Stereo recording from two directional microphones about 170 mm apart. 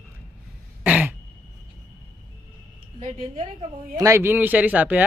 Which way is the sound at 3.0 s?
35° right (ahead or behind).